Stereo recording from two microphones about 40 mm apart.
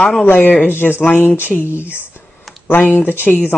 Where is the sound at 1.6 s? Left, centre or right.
Left.